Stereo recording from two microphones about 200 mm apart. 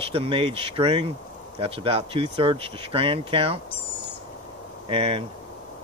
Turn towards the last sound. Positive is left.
turn(degrees=-25)  # may be behind; listen again after turning